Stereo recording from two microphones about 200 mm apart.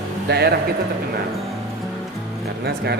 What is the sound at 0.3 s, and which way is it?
Speech, 55° right (ahead or behind).